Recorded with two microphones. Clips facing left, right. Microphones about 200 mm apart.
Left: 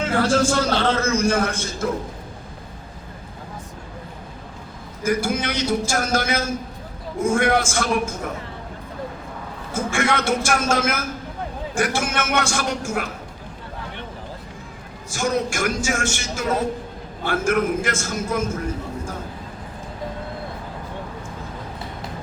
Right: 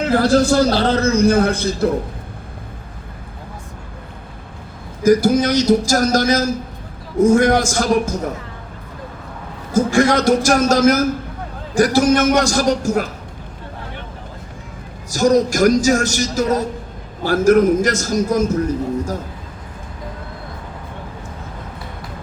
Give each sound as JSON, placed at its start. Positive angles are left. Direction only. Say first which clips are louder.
{"t": 0.0, "sound": "a man's voice", "louder": "right 5 dB", "side_deg": -35}
{"t": 5.0, "sound": "a man's voice", "louder": "right 9 dB", "side_deg": -40}
{"t": 9.7, "sound": "a man's voice", "louder": "right 8 dB", "side_deg": -40}
{"t": 15.1, "sound": "a man's voice", "louder": "right 8 dB", "side_deg": -40}